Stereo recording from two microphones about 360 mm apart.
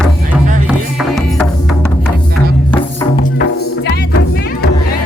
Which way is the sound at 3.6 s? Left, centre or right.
Left.